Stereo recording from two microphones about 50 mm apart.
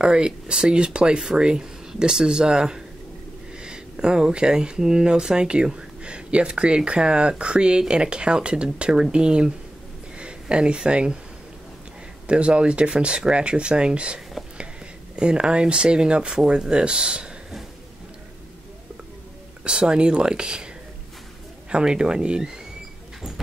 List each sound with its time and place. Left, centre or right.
0.0 s speech: centre
12.3 s speech: right
19.6 s speech: centre
21.6 s speech: centre